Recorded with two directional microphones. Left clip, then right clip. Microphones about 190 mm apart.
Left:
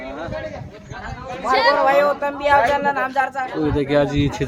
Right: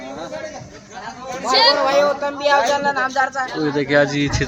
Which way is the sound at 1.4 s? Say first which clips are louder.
Right 1 dB; 20° right (ahead or behind).